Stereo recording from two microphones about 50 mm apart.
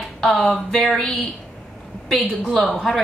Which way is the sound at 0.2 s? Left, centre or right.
Centre.